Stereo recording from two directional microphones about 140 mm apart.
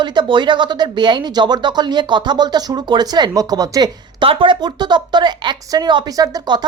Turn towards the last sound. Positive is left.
turn(degrees=-30)  # may be behind; listen again after turning